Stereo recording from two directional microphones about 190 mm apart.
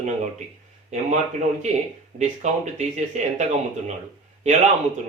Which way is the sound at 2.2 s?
35° right (ahead or behind).